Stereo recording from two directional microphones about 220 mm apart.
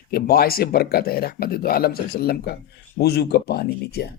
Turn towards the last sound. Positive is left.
turn(degrees=45)  # may be behind; listen again after turning